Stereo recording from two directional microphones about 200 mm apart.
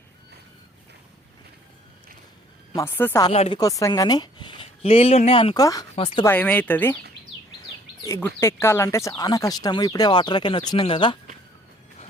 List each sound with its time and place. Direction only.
2.7 s speech: 10° left (ahead or behind)
3.3 s speech: 30° left (ahead or behind)
3.6 s speech: 15° left (ahead or behind)
6.2 s speech: 10° left (ahead or behind)
8.0 s speech: 15° left (ahead or behind)